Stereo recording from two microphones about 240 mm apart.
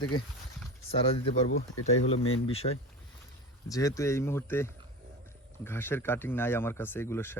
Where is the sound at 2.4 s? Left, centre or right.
Left.